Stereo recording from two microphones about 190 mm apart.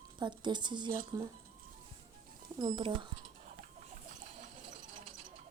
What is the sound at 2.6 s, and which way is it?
Speech, 25° right (ahead or behind).